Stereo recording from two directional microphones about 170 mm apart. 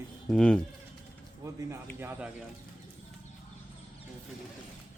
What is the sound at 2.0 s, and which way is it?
Speech, 15° right (ahead or behind).